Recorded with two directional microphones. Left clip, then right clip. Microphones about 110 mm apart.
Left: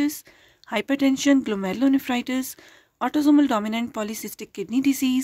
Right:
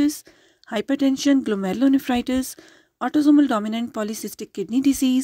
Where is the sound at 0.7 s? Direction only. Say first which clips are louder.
Even; 35° right (ahead or behind).